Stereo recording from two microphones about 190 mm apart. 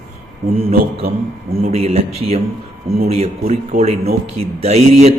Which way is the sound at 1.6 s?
35° right (ahead or behind).